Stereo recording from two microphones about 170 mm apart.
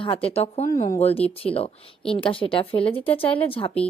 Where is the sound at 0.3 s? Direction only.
35° left (ahead or behind).